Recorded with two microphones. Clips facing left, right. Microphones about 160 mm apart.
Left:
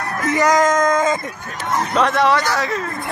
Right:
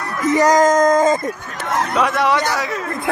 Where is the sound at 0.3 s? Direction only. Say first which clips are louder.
Right 3 dB; 35° right (ahead or behind).